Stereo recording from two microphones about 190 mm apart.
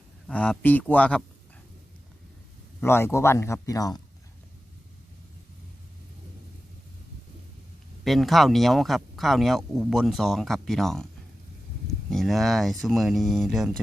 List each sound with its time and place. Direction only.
0.3 s speech: 5° left (ahead or behind)
2.8 s speech: 10° left (ahead or behind)
8.0 s speech: centre (ahead or behind)
12.1 s speech: centre (ahead or behind)